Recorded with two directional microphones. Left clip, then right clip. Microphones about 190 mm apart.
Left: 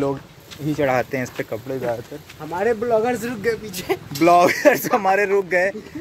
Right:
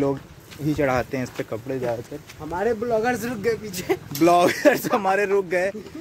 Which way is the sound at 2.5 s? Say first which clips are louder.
Left 3 dB; 15° left (ahead or behind).